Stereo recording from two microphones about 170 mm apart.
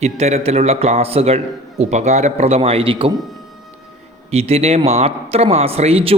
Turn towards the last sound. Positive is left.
turn(degrees=-35)  # may be behind; listen again after turning